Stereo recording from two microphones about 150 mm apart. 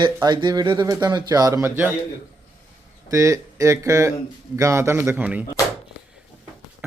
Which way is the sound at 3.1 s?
20° right (ahead or behind).